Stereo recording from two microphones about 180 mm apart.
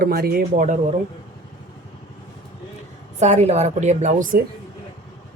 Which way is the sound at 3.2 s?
40° right (ahead or behind).